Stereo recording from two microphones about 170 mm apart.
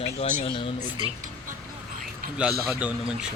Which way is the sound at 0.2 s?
30° left (ahead or behind).